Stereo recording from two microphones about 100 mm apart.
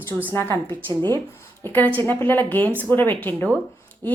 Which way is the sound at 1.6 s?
20° left (ahead or behind).